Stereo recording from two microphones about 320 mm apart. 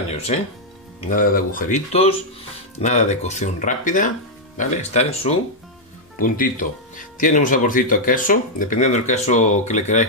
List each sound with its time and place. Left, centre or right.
1.1 s speech: left